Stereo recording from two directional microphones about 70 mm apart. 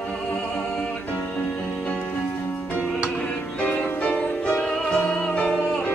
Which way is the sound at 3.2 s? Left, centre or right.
Centre.